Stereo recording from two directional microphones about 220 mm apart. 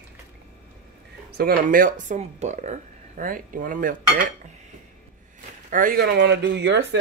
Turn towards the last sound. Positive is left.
turn(degrees=-50)  # may be behind; listen again after turning